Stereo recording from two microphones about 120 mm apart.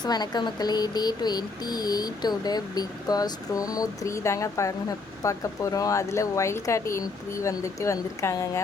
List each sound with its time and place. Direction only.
0.0 s speech: 35° left (ahead or behind)